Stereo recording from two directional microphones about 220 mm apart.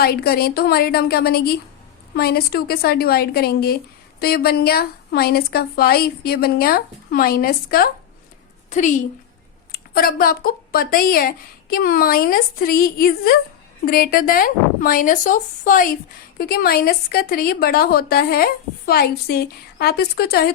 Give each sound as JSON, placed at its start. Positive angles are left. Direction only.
{"t": 0.0, "sound": "a woman's voice", "side_deg": 45}